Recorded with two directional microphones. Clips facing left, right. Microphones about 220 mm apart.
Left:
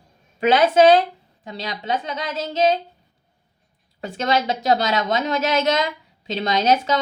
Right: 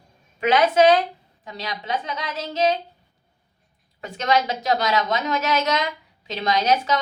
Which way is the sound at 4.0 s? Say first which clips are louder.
Even; 30° left (ahead or behind).